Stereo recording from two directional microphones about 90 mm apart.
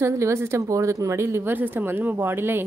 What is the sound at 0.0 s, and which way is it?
A woman's voice, 30° right (ahead or behind).